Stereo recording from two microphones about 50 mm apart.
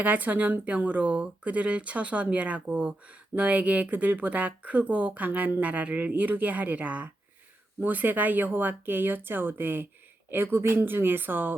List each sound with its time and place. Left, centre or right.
0.0 s speech: right